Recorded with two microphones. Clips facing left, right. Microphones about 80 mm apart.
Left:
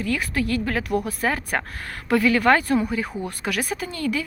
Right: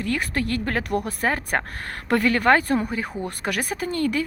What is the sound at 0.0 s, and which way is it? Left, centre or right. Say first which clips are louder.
A woman's voice: left 1 dB; right.